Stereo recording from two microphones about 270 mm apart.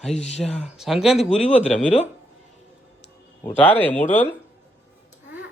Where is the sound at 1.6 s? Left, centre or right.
Left.